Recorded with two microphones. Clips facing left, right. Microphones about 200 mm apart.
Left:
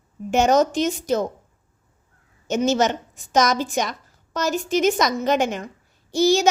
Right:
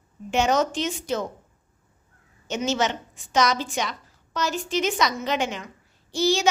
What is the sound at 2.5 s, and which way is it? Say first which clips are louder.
A woman's voice: left 5 dB; 45° left (ahead or behind).